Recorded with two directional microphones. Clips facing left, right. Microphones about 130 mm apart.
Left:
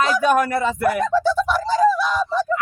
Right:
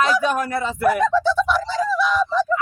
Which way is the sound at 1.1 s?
45° left (ahead or behind).